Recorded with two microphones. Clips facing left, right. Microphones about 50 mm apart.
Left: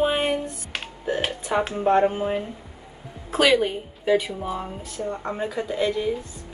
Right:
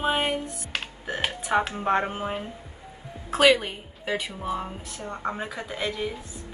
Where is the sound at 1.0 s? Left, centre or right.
Right.